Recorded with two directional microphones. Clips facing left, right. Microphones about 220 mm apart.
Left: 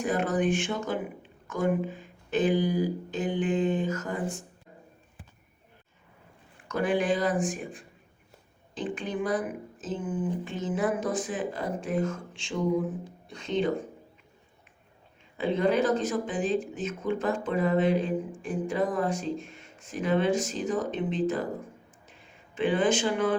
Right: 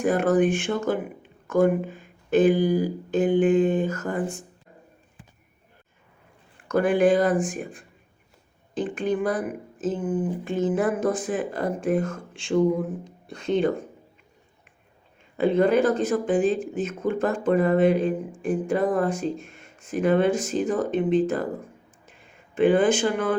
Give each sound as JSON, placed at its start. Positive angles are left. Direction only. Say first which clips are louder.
{"t": 0.0, "sound": "speech", "louder": "right 6 dB", "side_deg": -50}
{"t": 6.7, "sound": "speech", "louder": "right 7 dB", "side_deg": -50}
{"t": 13.2, "sound": "speech", "louder": "right 5 dB", "side_deg": -55}
{"t": 15.4, "sound": "speech", "louder": "right 5 dB", "side_deg": -50}
{"t": 22.5, "sound": "speech", "louder": "right 6 dB", "side_deg": -50}